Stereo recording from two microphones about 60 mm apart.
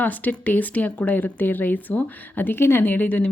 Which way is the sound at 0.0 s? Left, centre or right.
Left.